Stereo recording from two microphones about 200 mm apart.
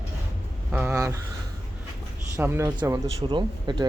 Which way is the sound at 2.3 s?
10° right (ahead or behind).